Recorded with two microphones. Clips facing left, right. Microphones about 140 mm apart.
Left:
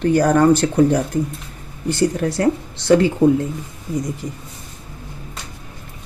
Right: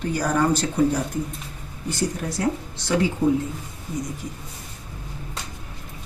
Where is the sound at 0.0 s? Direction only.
65° left (ahead or behind).